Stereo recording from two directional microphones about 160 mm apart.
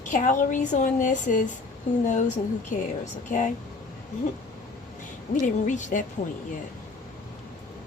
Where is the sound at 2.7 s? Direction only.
50° left (ahead or behind).